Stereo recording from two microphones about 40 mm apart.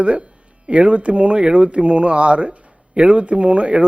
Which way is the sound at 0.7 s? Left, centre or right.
Right.